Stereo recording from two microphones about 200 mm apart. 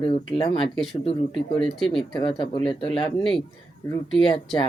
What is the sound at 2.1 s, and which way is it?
Speech, 25° left (ahead or behind).